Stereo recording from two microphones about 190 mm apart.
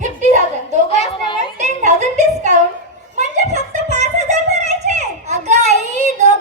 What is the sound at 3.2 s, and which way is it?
Music, 40° right (ahead or behind).